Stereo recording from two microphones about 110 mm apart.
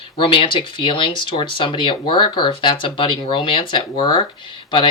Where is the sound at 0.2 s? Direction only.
50° left (ahead or behind).